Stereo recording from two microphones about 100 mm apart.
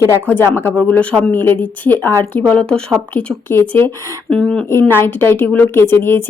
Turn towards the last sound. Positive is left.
turn(degrees=25)  # may be behind; listen again after turning